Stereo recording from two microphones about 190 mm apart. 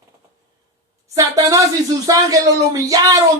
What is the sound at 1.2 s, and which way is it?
Speech, 15° right (ahead or behind).